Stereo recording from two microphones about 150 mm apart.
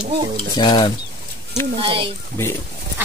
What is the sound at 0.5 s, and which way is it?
Stir, 30° left (ahead or behind).